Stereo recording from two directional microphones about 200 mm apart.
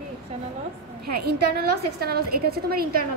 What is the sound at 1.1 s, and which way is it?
A woman's voice, 50° right (ahead or behind).